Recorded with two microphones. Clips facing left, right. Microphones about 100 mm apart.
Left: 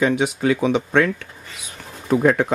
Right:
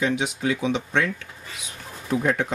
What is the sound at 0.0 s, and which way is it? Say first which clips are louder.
Speech: left 5 dB; 50° left (ahead or behind).